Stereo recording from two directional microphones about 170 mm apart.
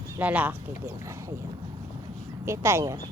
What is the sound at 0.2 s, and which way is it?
Speech, 10° right (ahead or behind).